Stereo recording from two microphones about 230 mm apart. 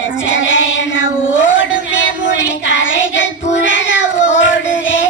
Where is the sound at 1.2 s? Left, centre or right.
Left.